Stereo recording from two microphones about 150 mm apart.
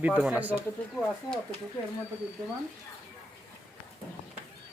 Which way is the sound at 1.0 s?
5° left (ahead or behind).